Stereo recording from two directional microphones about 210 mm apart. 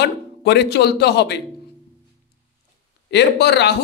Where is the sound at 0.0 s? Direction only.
55° left (ahead or behind).